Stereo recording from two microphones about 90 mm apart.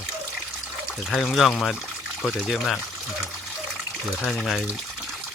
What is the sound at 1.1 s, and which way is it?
Speech, centre (ahead or behind).